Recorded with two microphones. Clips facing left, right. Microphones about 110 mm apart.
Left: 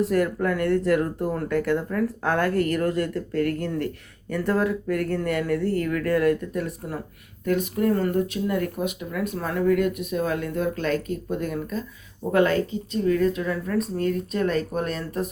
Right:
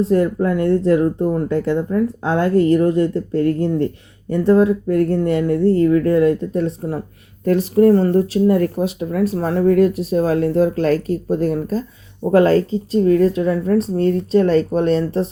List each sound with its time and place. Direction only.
0.0 s speech: 25° right (ahead or behind)